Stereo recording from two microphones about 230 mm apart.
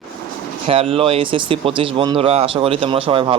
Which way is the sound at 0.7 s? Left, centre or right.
Right.